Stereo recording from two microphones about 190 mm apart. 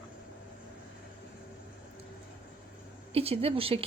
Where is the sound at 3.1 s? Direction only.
30° right (ahead or behind).